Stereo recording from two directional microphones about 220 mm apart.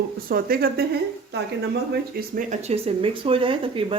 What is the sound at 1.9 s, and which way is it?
Speech, 40° right (ahead or behind).